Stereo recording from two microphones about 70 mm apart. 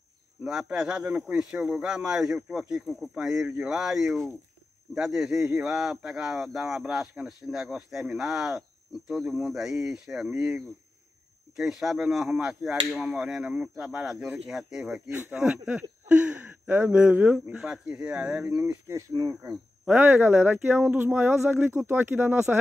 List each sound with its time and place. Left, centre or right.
0.4 s a man's voice: centre
15.0 s speech: right
18.6 s speech: right
19.1 s speech: right
19.5 s speech: right